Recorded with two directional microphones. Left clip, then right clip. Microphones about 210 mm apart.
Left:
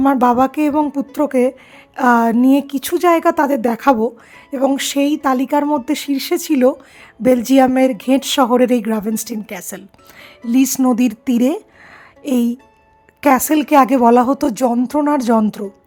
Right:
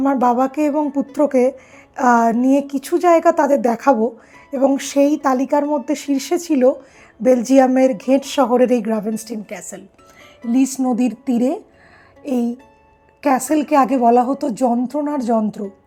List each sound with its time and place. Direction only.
0.0 s a woman's voice: 35° left (ahead or behind)
9.6 s speech: 25° left (ahead or behind)
12.2 s a woman's voice: 50° left (ahead or behind)
14.2 s speech: 60° left (ahead or behind)
14.9 s speech: 40° left (ahead or behind)